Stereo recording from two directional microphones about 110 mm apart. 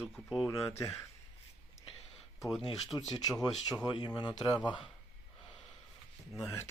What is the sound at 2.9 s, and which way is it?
Speech, 35° left (ahead or behind).